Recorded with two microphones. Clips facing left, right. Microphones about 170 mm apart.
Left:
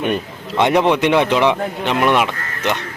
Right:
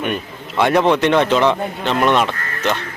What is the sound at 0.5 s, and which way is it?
Speech, 20° left (ahead or behind).